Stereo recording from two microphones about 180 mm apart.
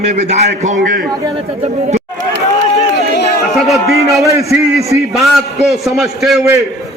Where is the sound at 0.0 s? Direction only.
40° right (ahead or behind).